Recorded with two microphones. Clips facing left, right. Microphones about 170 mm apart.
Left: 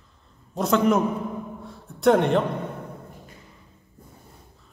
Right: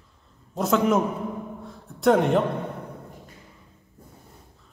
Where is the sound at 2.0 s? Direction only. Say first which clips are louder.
Left 1 dB; centre (ahead or behind).